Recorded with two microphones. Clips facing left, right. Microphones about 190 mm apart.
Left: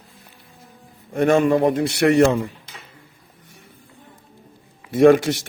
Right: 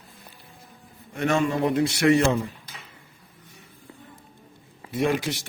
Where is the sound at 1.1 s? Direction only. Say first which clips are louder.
Left 7 dB; 50° left (ahead or behind).